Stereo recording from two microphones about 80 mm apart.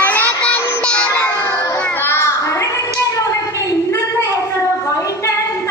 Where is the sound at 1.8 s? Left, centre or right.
Left.